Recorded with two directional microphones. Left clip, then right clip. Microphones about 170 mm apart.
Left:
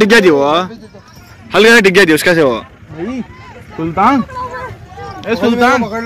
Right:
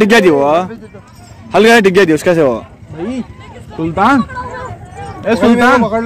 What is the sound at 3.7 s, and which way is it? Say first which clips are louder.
Speech: even; 20° left (ahead or behind).